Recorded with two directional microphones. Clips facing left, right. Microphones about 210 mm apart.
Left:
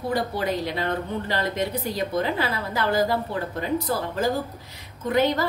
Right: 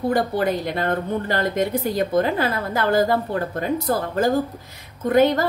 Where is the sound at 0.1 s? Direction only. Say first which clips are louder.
Right 2 dB; 50° right (ahead or behind).